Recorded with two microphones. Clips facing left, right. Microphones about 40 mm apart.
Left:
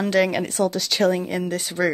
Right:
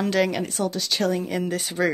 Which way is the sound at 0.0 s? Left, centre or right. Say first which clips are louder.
Left 2 dB; centre.